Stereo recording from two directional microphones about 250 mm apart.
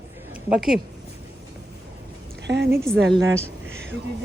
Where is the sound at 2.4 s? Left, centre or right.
Right.